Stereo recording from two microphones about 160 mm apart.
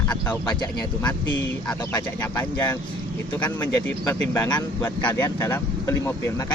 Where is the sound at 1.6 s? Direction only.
10° left (ahead or behind).